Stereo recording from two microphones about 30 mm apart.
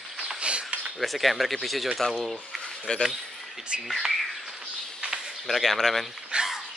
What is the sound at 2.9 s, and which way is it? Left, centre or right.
Speech, left.